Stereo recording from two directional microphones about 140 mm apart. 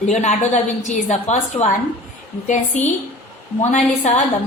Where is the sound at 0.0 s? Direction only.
55° left (ahead or behind).